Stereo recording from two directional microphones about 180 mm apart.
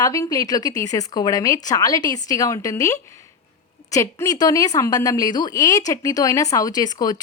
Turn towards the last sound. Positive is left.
turn(degrees=20)  # may be behind; listen again after turning